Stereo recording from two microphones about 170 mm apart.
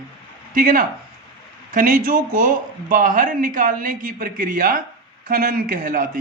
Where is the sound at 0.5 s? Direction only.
55° right (ahead or behind).